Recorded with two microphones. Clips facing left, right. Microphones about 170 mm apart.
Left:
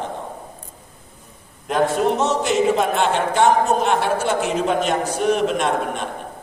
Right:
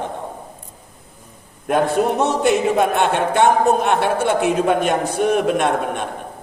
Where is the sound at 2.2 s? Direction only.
55° right (ahead or behind).